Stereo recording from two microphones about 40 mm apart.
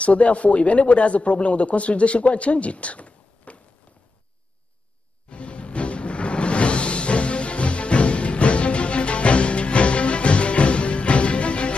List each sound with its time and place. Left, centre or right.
0.0 s speech: left
5.3 s music: left